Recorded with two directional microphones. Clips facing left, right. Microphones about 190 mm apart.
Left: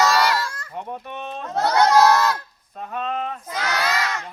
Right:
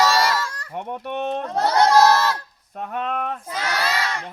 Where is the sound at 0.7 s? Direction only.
65° right (ahead or behind).